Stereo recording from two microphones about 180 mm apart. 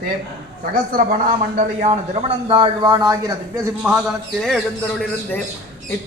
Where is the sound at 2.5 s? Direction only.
25° right (ahead or behind).